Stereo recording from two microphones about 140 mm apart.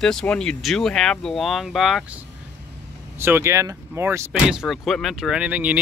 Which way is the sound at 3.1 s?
15° right (ahead or behind).